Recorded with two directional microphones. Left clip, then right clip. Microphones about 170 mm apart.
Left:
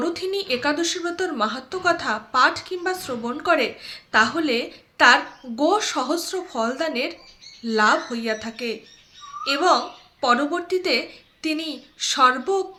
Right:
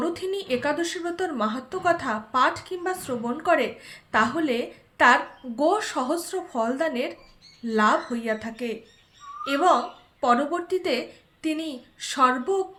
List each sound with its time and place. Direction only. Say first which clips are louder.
0.0 s a child's voice: left 3 dB; 15° left (ahead or behind)